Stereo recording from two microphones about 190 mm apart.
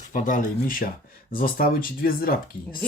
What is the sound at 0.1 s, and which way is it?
Speech, 45° left (ahead or behind).